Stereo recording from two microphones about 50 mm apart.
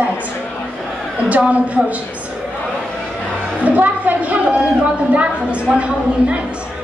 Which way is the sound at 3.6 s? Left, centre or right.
Right.